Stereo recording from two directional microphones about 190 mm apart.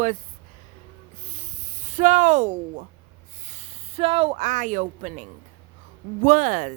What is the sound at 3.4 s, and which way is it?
Speech, 35° right (ahead or behind).